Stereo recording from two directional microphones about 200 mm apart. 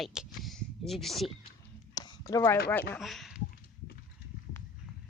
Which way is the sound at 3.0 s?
Centre (ahead or behind).